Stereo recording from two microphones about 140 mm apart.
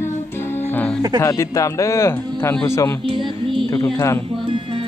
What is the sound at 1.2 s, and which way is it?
Speech, 25° left (ahead or behind).